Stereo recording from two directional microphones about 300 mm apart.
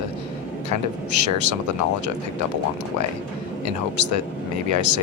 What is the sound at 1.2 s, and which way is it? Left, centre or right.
Speech, right.